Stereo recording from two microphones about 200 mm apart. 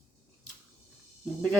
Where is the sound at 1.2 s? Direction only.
Centre (ahead or behind).